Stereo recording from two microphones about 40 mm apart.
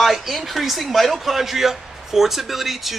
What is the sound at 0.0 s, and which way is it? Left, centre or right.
Speech, centre.